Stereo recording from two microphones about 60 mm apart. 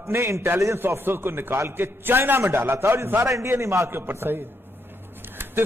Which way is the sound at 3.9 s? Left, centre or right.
Right.